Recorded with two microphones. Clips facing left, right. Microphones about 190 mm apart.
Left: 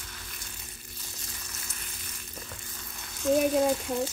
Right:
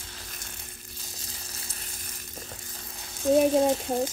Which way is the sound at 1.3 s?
30° right (ahead or behind).